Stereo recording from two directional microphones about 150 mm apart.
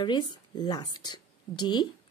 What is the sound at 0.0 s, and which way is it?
Speech, 30° left (ahead or behind).